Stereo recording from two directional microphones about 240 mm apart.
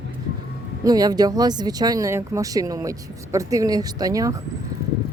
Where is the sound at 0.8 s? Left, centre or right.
Centre.